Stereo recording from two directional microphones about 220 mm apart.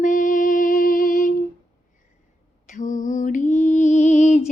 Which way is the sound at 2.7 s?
35° left (ahead or behind).